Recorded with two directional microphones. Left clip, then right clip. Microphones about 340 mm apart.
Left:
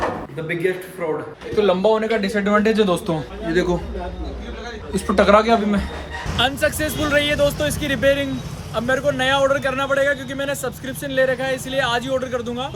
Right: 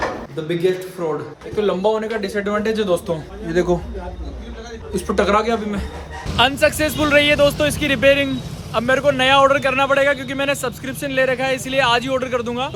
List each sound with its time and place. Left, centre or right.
1.5 s speech: centre
3.5 s a man's voice: centre
4.9 s a man's voice: centre